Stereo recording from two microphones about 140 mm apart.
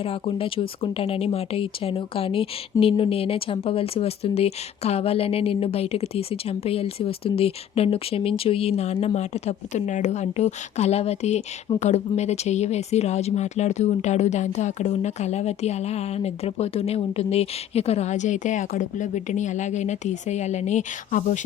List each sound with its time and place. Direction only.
0.0 s speech: 45° left (ahead or behind); by 21.4 s 65° left (ahead or behind)